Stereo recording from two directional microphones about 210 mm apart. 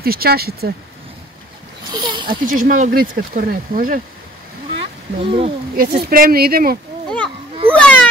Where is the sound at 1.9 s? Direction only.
20° right (ahead or behind).